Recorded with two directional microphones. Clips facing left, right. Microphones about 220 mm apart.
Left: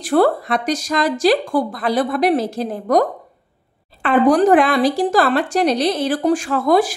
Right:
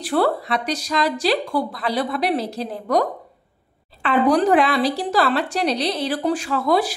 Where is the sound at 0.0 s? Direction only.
45° left (ahead or behind).